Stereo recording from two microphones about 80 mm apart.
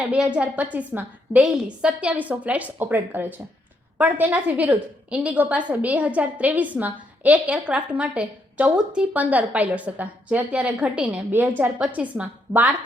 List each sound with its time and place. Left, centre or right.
0.0 s a woman's voice: centre
1.4 s a woman's voice: centre